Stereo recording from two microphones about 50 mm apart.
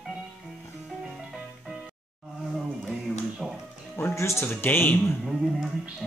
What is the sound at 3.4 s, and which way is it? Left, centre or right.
Music, centre.